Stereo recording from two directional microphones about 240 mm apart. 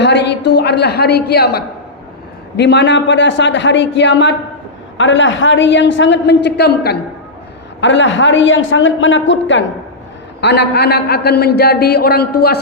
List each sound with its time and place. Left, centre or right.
0.0 s a man's voice: left